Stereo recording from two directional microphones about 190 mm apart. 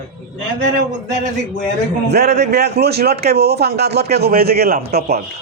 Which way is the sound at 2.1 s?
60° right (ahead or behind).